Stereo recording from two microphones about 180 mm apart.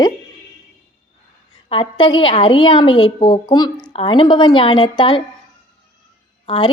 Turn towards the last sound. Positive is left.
turn(degrees=30)  # may be behind; listen again after turning